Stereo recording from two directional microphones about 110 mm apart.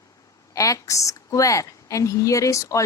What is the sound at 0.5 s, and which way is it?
Speech, 30° left (ahead or behind).